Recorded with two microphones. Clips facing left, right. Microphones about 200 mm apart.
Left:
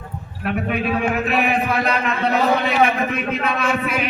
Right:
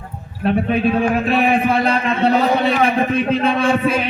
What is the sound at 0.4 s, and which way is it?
A man's voice, 30° right (ahead or behind).